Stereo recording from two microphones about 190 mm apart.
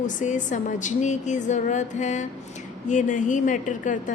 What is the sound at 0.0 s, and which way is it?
A woman's voice, 40° left (ahead or behind).